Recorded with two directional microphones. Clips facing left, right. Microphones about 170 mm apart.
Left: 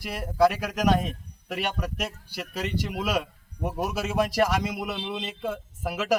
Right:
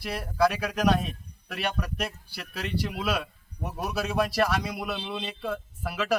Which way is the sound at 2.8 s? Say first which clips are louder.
Left 1 dB; 20° left (ahead or behind).